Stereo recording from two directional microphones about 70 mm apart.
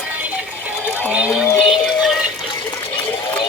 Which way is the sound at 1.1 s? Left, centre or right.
Centre.